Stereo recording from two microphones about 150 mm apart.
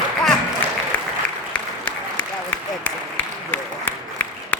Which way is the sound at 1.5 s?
5° left (ahead or behind).